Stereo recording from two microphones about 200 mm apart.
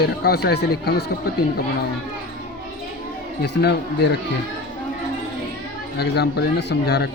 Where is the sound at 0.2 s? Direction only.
50° left (ahead or behind).